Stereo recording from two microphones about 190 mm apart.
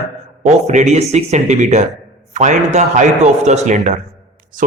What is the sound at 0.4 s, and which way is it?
A man's voice, 35° right (ahead or behind).